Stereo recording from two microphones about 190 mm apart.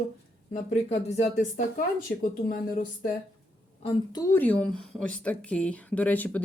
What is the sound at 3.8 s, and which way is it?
Speech, 20° left (ahead or behind).